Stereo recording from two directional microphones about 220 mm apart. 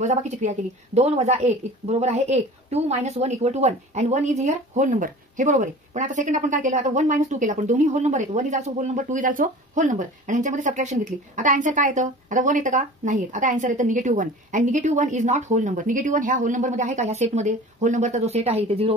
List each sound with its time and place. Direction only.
0.0 s a woman's voice: 30° right (ahead or behind)